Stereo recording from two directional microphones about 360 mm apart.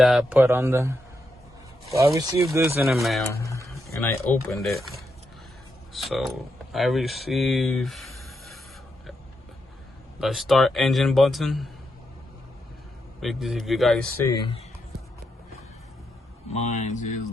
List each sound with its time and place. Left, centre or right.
0.0 s a man's voice: centre
10.2 s speech: centre
13.1 s speech: centre
14.3 s speech: centre
16.6 s speech: centre